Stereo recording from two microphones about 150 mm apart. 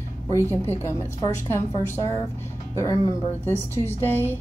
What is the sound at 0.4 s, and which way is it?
A woman's voice, 15° left (ahead or behind).